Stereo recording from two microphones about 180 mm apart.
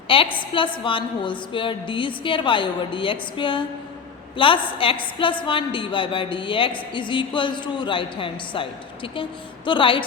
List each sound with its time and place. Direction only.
0.1 s a woman's voice: 30° left (ahead or behind)
9.6 s a woman's voice: 30° left (ahead or behind)